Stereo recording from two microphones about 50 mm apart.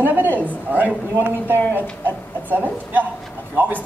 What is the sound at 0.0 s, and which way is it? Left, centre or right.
Speech, right.